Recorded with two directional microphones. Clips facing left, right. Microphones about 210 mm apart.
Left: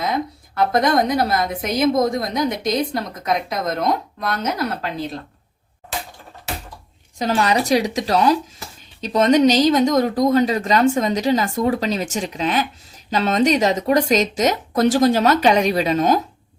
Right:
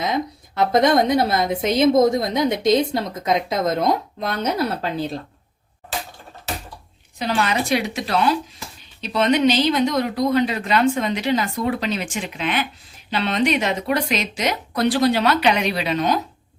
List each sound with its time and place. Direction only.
0.0 s a woman's voice: 20° right (ahead or behind)
7.2 s speech: 40° left (ahead or behind)